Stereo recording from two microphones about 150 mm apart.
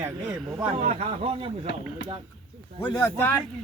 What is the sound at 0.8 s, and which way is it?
Speech, 45° right (ahead or behind).